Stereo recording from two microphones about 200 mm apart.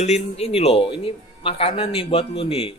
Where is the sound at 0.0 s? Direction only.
30° left (ahead or behind).